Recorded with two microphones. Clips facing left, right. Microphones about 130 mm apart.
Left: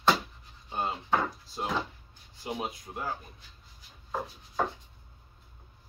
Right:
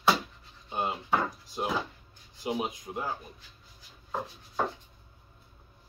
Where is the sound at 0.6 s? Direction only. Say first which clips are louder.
Right 1 dB; 15° right (ahead or behind).